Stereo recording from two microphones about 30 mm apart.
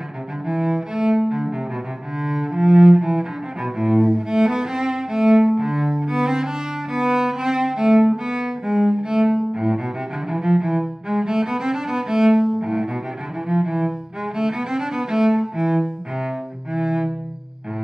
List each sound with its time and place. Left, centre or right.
0.5 s music: centre
2.2 s cello: centre
4.4 s music: centre
16.7 s cello: centre